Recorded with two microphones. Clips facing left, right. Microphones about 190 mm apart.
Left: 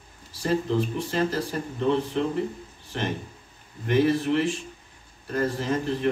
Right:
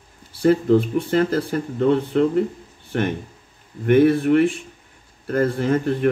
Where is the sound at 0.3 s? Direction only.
55° right (ahead or behind).